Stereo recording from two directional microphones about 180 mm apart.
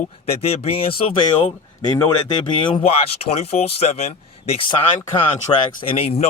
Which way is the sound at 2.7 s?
35° left (ahead or behind).